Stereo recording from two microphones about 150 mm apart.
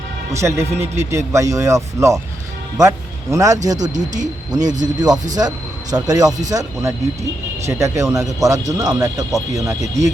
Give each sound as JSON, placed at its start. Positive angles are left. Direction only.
{"t": 0.3, "sound": "speech", "side_deg": -20}
{"t": 3.9, "sound": "speech", "side_deg": -55}
{"t": 4.8, "sound": "speech", "side_deg": -25}